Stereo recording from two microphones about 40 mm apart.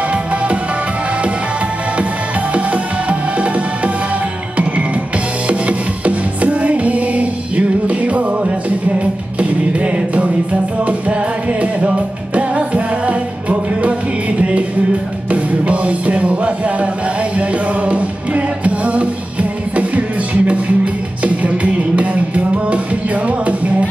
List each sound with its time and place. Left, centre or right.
2.5 s music: right
5.5 s music: right
12.4 s music: right
15.3 s music: right